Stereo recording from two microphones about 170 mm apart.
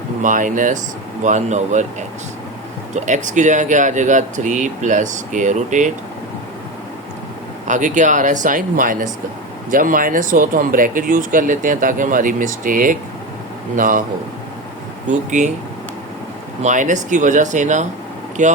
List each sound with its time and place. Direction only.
0.2 s speech: 50° right (ahead or behind)
7.7 s speech: 45° right (ahead or behind)
15.1 s speech: 45° right (ahead or behind)
16.6 s speech: 45° right (ahead or behind)